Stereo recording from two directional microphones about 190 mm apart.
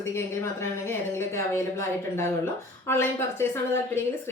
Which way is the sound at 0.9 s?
15° left (ahead or behind).